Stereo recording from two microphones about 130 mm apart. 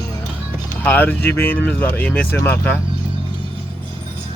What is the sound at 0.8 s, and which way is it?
Speech, 15° left (ahead or behind).